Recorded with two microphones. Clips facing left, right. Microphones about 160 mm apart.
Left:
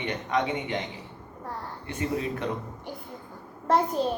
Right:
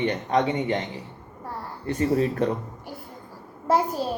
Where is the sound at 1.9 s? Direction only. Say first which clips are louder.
Right 7 dB; 40° right (ahead or behind).